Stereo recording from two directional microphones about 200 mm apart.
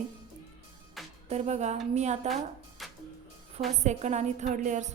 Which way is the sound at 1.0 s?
Centre (ahead or behind).